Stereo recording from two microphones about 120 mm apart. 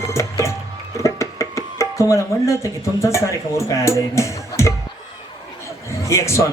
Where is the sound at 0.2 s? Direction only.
25° left (ahead or behind).